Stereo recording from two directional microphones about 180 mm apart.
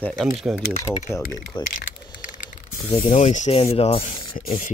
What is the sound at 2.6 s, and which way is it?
Speech, 35° left (ahead or behind).